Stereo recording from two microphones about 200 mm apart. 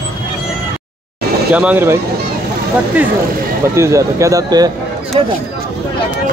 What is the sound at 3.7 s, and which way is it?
Speech, 15° right (ahead or behind).